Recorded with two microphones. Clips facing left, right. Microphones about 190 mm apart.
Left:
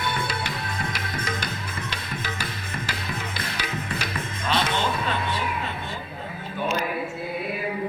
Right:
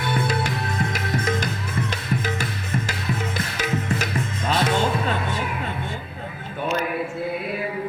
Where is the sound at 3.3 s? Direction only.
45° right (ahead or behind).